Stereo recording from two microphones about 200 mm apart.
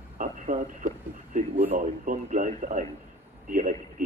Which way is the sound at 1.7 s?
35° right (ahead or behind).